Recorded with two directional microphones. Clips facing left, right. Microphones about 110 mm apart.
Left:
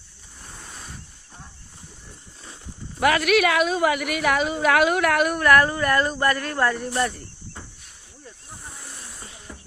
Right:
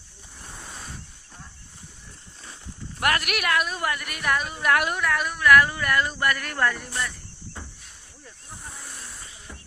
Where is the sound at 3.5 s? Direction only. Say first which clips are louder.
Left 5 dB; 90° left.